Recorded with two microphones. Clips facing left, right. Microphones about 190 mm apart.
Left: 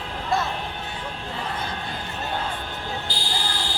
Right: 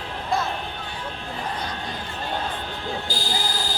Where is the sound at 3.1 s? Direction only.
45° right (ahead or behind).